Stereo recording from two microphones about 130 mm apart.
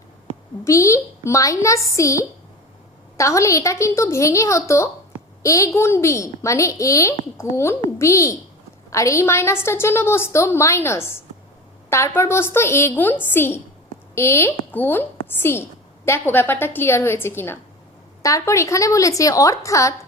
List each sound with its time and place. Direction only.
0.6 s a woman's voice: 25° left (ahead or behind)